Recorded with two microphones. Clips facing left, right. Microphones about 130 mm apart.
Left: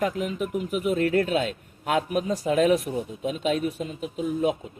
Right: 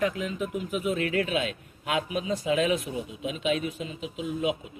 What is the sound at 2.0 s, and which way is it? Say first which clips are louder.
Speech: left 3 dB; 60° left (ahead or behind).